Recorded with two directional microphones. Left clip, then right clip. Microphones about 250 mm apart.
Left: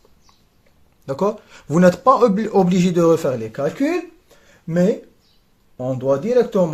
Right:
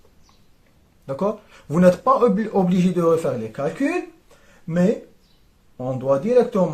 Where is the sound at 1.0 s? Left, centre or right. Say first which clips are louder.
Left 3 dB; left.